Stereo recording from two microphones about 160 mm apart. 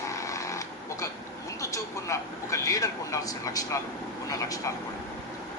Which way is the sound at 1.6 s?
20° left (ahead or behind).